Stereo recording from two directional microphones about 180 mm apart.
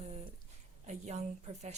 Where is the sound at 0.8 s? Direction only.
40° right (ahead or behind).